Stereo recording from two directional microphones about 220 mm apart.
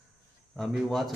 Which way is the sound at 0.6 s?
Centre (ahead or behind).